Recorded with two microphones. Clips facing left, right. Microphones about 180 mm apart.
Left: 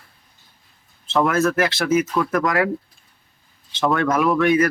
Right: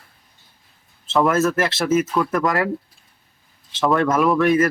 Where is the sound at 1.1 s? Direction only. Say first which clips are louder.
Right 1 dB; centre (ahead or behind).